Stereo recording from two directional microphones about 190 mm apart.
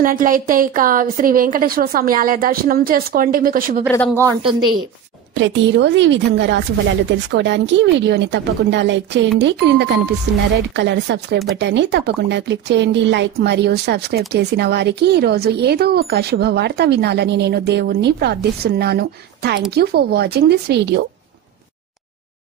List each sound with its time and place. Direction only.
0.0 s a woman's voice: 45° right (ahead or behind)
4.1 s a woman's voice: 15° right (ahead or behind)
4.4 s a woman's voice: 25° right (ahead or behind)
5.3 s speech: 70° right (ahead or behind)